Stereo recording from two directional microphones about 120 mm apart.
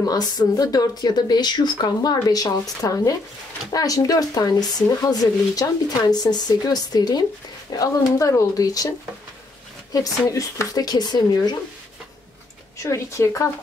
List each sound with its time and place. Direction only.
0.0 s speech: 30° left (ahead or behind)
9.9 s speech: 30° left (ahead or behind)
12.7 s speech: 25° left (ahead or behind)